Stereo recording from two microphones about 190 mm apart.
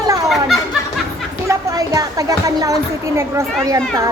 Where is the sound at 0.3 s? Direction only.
Centre (ahead or behind).